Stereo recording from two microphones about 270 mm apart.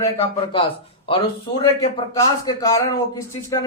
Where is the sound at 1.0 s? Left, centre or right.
Centre.